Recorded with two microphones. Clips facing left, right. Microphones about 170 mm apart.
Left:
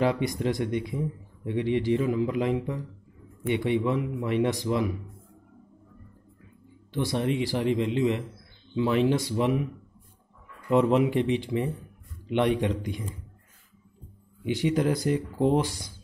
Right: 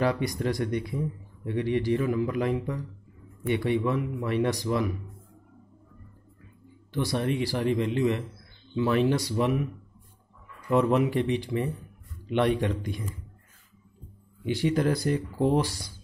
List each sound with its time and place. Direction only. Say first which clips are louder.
0.0 s speech: left 1 dB; 20° left (ahead or behind)
7.0 s speech: left 1 dB; 20° left (ahead or behind)
10.7 s speech: left 1 dB; 15° left (ahead or behind)
14.4 s speech: even; 15° left (ahead or behind)